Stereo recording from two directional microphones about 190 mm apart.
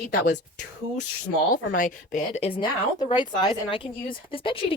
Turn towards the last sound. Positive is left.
turn(degrees=30)  # may be behind; listen again after turning